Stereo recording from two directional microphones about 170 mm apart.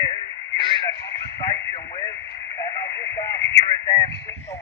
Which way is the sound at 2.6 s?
20° left (ahead or behind).